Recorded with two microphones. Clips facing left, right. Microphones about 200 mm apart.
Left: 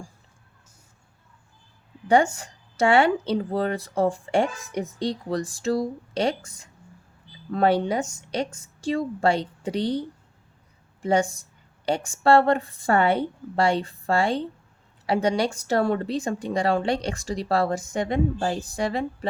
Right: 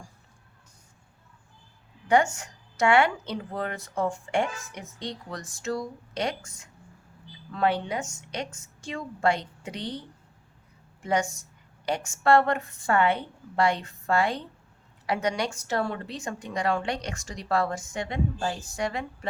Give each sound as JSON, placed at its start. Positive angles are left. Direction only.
{"t": 2.0, "sound": "a woman's voice", "side_deg": 35}
{"t": 11.0, "sound": "a woman's voice", "side_deg": 30}